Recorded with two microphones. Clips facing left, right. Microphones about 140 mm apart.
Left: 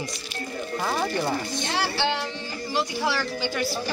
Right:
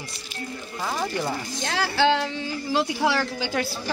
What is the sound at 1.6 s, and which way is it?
Speech, 90° right.